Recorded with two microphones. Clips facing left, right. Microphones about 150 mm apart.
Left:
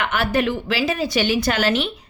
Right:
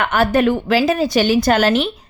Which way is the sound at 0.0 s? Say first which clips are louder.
Right 5 dB; 45° right (ahead or behind).